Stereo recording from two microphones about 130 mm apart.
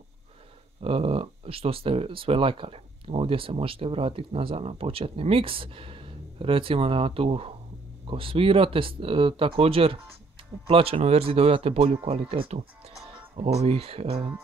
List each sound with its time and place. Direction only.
0.8 s speech: 45° right (ahead or behind)